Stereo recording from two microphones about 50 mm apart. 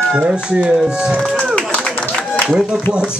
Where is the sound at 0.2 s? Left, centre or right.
Right.